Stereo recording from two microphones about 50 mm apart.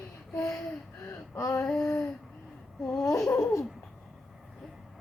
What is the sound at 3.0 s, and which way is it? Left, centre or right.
Laughter, left.